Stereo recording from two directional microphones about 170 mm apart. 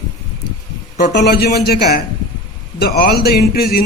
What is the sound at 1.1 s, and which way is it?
A man's voice, 70° left (ahead or behind).